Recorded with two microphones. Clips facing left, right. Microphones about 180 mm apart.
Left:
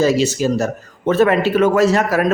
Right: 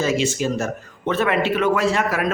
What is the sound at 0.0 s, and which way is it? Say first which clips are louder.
A man's voice: left 5 dB; 35° left (ahead or behind).